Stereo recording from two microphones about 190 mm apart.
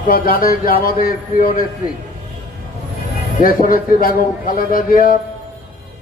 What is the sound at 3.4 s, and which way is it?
A man's voice, 50° left (ahead or behind).